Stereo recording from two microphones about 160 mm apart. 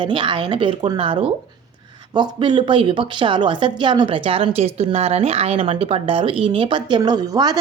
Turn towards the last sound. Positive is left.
turn(degrees=-25)  # may be behind; listen again after turning